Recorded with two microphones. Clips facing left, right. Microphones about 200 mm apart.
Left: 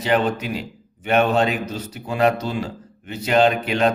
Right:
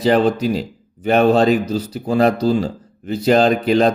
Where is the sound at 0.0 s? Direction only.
35° right (ahead or behind).